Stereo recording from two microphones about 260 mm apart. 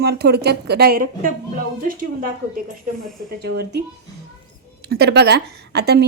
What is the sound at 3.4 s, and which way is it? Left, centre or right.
Speech, right.